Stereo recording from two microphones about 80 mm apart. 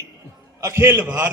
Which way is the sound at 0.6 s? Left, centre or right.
Right.